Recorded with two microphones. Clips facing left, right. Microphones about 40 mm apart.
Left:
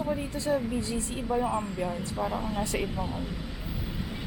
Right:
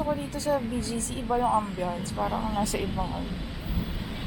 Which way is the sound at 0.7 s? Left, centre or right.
Left.